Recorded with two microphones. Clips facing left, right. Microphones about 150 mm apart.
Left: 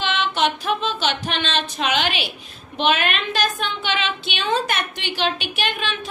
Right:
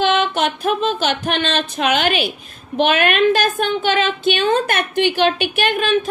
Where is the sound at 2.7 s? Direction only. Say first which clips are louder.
Right 5 dB; 50° right (ahead or behind).